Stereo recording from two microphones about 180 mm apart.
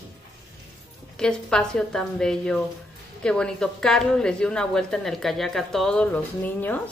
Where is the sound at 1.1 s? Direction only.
5° left (ahead or behind).